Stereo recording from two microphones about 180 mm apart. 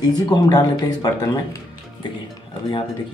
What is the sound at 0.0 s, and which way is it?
Speech, 20° left (ahead or behind).